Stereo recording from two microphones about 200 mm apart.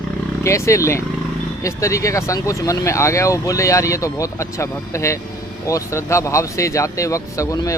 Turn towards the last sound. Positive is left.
turn(degrees=15)  # may be behind; listen again after turning